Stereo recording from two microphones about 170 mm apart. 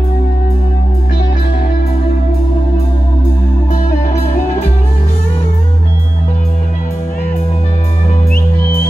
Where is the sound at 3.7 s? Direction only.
45° left (ahead or behind).